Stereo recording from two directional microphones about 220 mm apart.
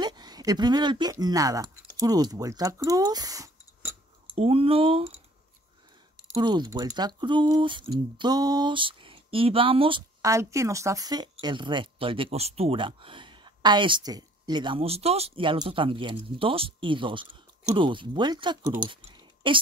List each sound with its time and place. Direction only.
0.0 s speech: 20° right (ahead or behind)
4.4 s speech: 25° right (ahead or behind)
6.3 s speech: 20° right (ahead or behind)